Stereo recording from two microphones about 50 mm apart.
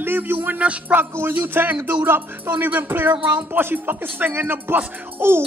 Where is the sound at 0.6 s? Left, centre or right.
Right.